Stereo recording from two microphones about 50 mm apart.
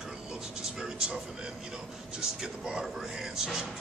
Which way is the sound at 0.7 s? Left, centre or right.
Centre.